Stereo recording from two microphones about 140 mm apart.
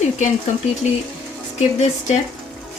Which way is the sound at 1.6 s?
55° left (ahead or behind).